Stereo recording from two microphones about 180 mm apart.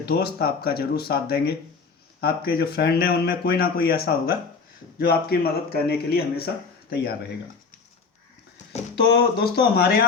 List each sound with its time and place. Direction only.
0.0 s speech: 60° left (ahead or behind)
9.0 s speech: 65° left (ahead or behind)